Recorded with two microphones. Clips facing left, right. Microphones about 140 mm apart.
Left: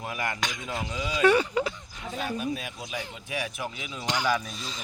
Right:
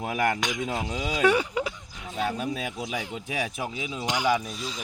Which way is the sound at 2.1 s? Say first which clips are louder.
Right 2 dB; 80° right.